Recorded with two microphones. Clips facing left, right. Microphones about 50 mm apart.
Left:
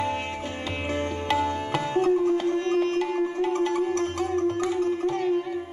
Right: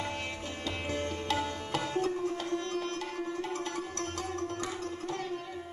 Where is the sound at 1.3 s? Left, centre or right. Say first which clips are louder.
Left 9 dB; left.